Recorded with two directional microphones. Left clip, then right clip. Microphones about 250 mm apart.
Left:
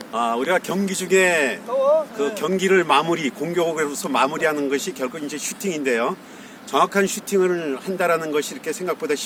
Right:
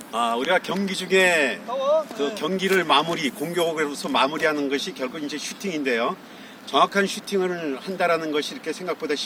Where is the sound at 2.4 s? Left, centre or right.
Centre.